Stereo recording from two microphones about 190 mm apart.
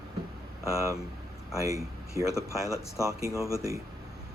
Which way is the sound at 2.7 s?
15° left (ahead or behind).